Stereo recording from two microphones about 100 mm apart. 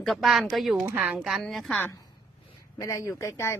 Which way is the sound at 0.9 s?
15° right (ahead or behind).